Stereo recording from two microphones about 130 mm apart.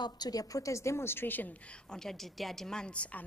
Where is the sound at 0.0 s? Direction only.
30° left (ahead or behind).